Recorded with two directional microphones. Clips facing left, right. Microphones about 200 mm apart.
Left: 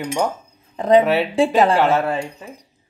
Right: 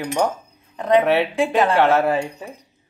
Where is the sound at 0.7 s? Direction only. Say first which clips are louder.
Left 2 dB; 30° left (ahead or behind).